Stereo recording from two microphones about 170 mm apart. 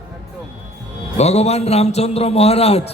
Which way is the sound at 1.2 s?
40° left (ahead or behind).